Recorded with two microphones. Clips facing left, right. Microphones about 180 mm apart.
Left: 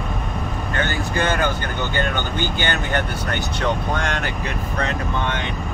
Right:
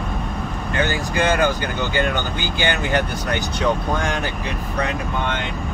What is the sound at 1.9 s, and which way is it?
Speech, 15° right (ahead or behind).